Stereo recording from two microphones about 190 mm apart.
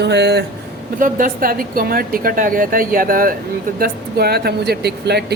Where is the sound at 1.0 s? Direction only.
45° right (ahead or behind).